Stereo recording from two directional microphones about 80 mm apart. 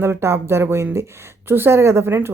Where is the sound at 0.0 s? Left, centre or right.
Right.